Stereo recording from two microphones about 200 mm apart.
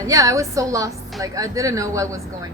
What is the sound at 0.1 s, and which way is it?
A woman's voice, 15° right (ahead or behind).